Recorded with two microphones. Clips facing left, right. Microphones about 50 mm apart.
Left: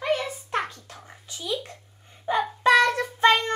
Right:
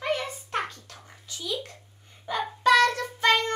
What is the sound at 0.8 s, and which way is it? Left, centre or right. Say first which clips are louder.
A child's voice: left 2 dB; left.